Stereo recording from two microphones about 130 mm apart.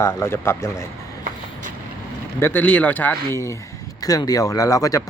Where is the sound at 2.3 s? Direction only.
15° left (ahead or behind).